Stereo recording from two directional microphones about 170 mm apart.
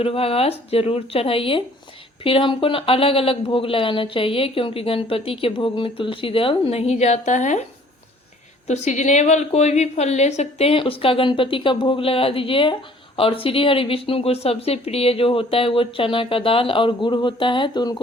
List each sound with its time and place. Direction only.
0.0 s speech: 35° left (ahead or behind)
8.6 s speech: 45° left (ahead or behind); by 18.0 s 25° left (ahead or behind)